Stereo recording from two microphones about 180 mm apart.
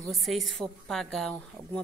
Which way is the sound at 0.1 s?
Centre (ahead or behind).